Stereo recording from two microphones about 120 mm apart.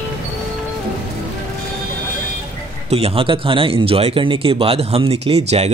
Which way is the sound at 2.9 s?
55° right (ahead or behind).